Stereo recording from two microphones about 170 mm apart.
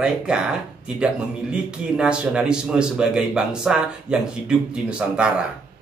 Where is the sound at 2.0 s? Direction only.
5° right (ahead or behind).